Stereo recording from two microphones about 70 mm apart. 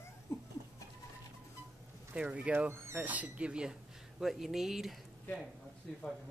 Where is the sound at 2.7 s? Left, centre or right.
Right.